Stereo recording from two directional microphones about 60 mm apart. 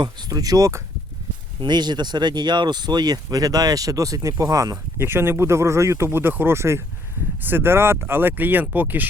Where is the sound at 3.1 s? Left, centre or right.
Right.